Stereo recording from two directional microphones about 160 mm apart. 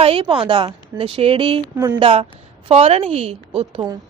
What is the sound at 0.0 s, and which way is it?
A woman's voice, 35° right (ahead or behind).